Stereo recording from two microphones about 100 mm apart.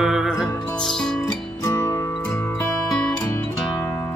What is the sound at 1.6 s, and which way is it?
Music, 30° left (ahead or behind).